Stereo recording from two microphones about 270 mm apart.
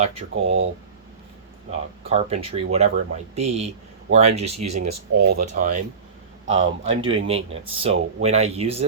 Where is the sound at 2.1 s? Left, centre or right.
Right.